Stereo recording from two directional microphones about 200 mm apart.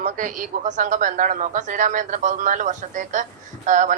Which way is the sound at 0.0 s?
40° right (ahead or behind).